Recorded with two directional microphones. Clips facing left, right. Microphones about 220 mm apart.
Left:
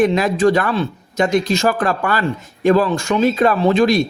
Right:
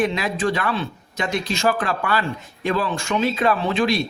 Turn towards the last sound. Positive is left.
turn(degrees=40)  # may be behind; listen again after turning